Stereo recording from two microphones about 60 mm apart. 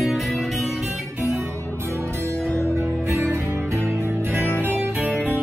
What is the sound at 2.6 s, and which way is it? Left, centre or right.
Music, right.